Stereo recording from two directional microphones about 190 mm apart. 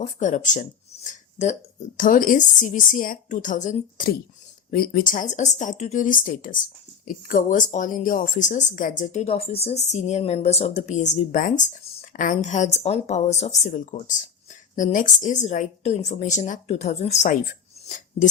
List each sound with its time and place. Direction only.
0.0 s a woman's voice: 40° left (ahead or behind)